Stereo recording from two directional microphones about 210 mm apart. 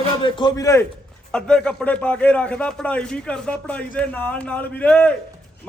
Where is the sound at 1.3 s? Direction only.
5° left (ahead or behind).